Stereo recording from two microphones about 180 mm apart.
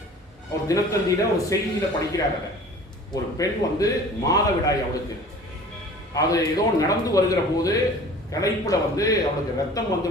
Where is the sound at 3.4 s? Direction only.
20° left (ahead or behind).